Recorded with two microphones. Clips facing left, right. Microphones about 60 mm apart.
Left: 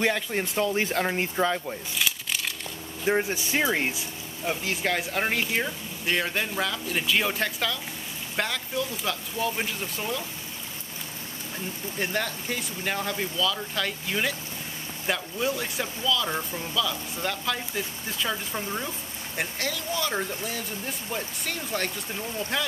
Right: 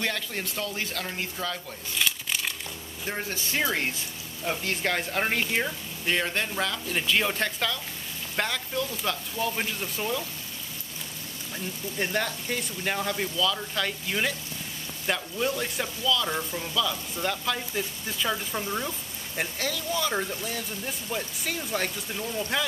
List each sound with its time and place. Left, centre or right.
0.0 s speech: centre
2.0 s crumpling: centre
3.1 s speech: centre
4.5 s speech: centre
11.5 s speech: centre